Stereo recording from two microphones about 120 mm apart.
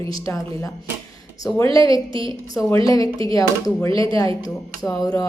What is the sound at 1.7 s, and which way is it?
A woman's voice, 30° left (ahead or behind).